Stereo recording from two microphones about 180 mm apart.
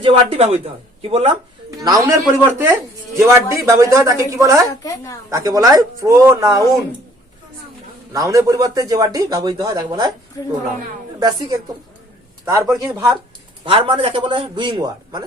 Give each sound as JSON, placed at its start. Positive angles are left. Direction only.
{"t": 0.0, "sound": "speech", "side_deg": -30}
{"t": 2.0, "sound": "speech", "side_deg": -15}
{"t": 4.8, "sound": "a woman's voice", "side_deg": 20}
{"t": 5.3, "sound": "speech", "side_deg": -15}
{"t": 8.1, "sound": "speech", "side_deg": -20}
{"t": 11.2, "sound": "speech", "side_deg": -20}
{"t": 12.7, "sound": "speech", "side_deg": -15}
{"t": 13.7, "sound": "speech", "side_deg": -30}